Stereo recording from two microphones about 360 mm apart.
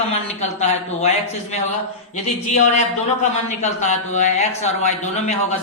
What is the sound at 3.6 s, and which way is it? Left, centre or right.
Speech, centre.